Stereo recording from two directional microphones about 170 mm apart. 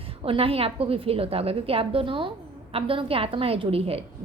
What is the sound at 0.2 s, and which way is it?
A woman's voice, 30° right (ahead or behind).